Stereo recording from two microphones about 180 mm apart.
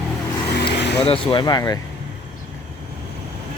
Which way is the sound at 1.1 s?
30° left (ahead or behind).